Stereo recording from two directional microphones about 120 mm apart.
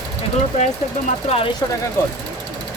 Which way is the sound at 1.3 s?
60° left (ahead or behind).